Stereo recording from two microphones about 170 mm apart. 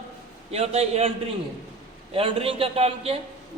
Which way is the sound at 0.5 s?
40° right (ahead or behind).